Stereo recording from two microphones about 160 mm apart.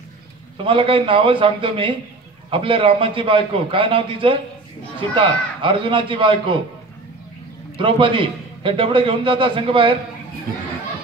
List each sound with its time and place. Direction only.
0.7 s a man's voice: 35° right (ahead or behind)
7.7 s a man's voice: 35° right (ahead or behind)